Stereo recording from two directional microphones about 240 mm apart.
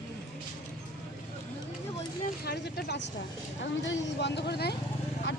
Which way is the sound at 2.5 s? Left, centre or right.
Left.